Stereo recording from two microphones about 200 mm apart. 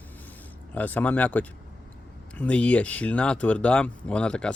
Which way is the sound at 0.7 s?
10° left (ahead or behind).